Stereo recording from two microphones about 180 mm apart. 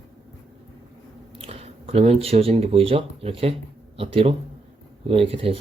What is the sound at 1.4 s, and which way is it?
Speech, 35° right (ahead or behind).